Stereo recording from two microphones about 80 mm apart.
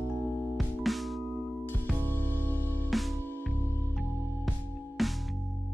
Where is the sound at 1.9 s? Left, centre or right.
Left.